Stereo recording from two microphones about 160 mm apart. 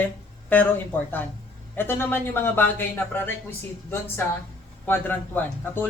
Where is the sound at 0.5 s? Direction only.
10° left (ahead or behind).